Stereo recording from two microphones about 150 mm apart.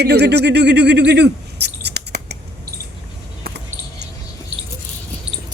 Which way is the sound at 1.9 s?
90° right.